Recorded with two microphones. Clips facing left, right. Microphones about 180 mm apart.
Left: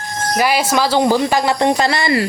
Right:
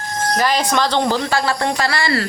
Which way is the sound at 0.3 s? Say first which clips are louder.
Left 2 dB; 10° left (ahead or behind).